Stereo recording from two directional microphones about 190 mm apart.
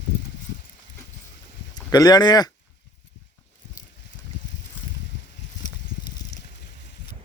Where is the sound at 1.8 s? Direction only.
20° left (ahead or behind).